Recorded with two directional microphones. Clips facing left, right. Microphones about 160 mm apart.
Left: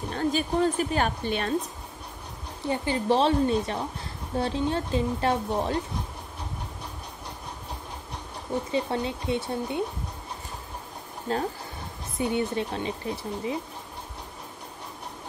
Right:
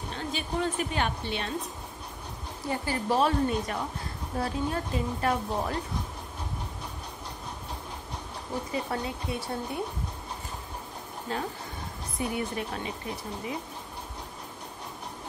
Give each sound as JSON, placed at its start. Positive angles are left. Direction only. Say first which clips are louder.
{"t": 0.1, "sound": "speech", "louder": "left 7 dB", "side_deg": 45}
{"t": 2.7, "sound": "speech", "louder": "left 4 dB", "side_deg": 25}
{"t": 8.7, "sound": "speech", "louder": "left 4 dB", "side_deg": 25}
{"t": 12.2, "sound": "speech", "louder": "left 5 dB", "side_deg": 25}